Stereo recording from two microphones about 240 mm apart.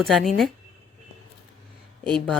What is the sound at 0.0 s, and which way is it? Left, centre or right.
Speech, centre.